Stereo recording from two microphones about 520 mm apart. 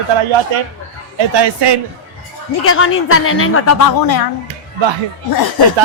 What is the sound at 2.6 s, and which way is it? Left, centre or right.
Speech, left.